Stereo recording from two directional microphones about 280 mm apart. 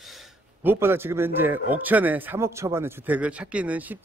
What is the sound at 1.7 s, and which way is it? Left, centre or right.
A man's voice, centre.